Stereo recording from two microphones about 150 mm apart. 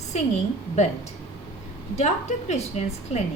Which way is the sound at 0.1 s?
50° left (ahead or behind).